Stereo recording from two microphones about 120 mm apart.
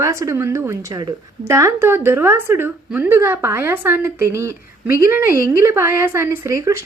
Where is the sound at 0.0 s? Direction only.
25° right (ahead or behind).